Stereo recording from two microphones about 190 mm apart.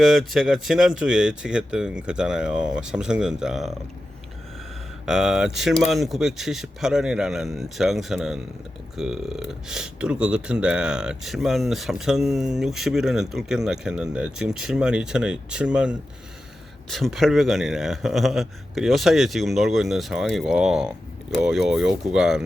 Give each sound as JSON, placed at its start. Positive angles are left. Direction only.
{"t": 0.0, "sound": "speech", "side_deg": 0}
{"t": 5.0, "sound": "speech", "side_deg": -5}